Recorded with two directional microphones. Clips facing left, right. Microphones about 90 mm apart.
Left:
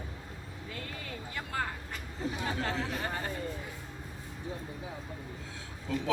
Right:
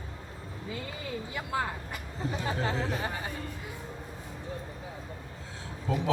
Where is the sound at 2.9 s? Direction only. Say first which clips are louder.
Right 2 dB; 5° right (ahead or behind).